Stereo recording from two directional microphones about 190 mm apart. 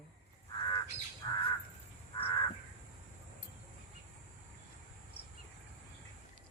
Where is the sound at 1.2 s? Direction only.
20° left (ahead or behind).